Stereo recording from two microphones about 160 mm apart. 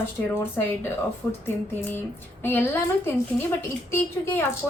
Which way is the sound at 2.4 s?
15° left (ahead or behind).